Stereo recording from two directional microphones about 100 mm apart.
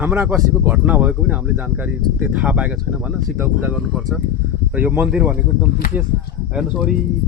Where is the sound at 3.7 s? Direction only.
5° right (ahead or behind).